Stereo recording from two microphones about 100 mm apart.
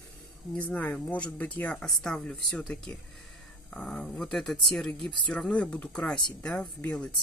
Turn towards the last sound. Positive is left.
turn(degrees=10)  # may be behind; listen again after turning